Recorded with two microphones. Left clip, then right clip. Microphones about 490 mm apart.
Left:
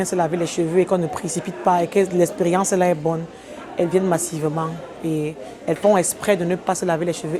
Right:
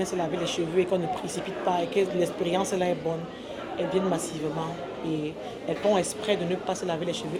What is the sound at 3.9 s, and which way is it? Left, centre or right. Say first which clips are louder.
Speech: left 6 dB; left.